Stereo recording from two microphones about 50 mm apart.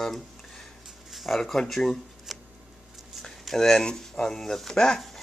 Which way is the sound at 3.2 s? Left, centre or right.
Centre.